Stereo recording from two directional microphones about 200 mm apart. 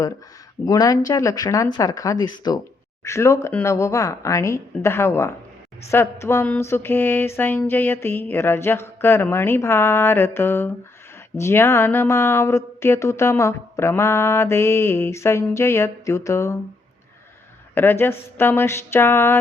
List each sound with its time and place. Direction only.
0.6 s speech: 20° left (ahead or behind)
17.7 s speech: 10° left (ahead or behind)